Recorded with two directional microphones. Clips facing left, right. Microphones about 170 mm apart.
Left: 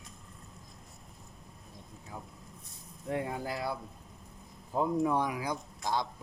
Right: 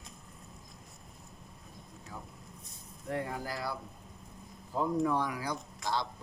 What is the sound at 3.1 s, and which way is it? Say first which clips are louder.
Speech: left 2 dB; 20° left (ahead or behind).